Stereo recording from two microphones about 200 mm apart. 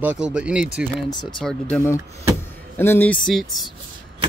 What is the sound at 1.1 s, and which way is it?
Speech, 20° left (ahead or behind).